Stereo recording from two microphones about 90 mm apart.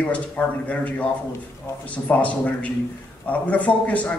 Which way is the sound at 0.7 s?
15° left (ahead or behind).